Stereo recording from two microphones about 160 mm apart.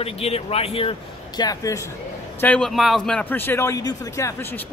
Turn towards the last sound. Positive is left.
turn(degrees=15)  # may be behind; listen again after turning